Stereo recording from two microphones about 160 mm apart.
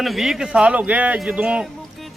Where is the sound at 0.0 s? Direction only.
Centre (ahead or behind).